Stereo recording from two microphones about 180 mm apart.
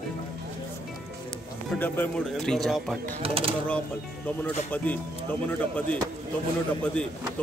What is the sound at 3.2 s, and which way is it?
Speech, 30° right (ahead or behind).